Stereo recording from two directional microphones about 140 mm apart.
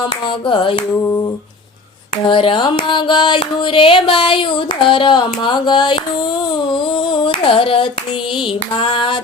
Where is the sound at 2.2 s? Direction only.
35° left (ahead or behind).